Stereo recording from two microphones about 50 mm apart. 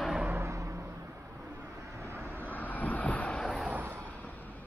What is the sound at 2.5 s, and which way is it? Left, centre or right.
Vehicle, left.